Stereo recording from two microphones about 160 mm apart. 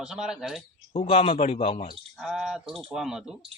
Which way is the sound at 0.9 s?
35° left (ahead or behind).